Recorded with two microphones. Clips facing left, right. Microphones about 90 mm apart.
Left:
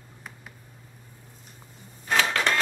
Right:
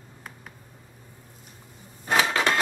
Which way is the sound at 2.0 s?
15° right (ahead or behind).